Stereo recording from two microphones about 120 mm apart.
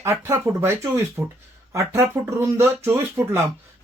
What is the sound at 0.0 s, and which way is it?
Speech, 20° right (ahead or behind).